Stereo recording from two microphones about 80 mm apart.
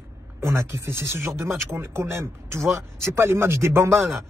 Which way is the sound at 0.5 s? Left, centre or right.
Right.